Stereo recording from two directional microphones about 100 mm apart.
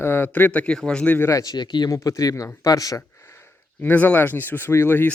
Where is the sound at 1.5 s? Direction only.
50° left (ahead or behind).